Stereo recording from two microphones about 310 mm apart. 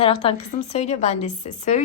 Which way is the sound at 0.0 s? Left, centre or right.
Centre.